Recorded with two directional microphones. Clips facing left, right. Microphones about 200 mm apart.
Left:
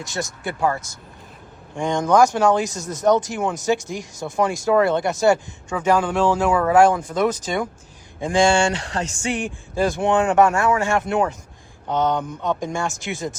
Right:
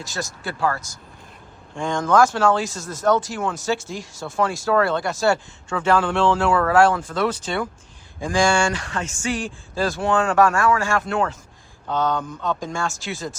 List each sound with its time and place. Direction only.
0.4 s speech: 20° left (ahead or behind)
9.3 s speech: 20° left (ahead or behind)